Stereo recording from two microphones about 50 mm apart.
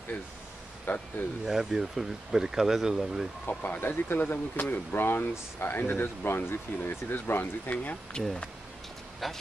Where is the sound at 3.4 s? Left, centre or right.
Left.